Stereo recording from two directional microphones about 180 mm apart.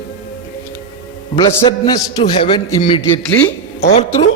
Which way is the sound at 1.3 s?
20° left (ahead or behind).